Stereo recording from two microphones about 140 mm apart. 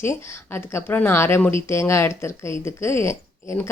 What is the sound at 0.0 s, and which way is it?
Speech, 20° left (ahead or behind).